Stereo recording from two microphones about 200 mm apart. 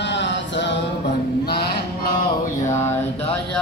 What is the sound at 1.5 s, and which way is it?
Music, 55° left (ahead or behind).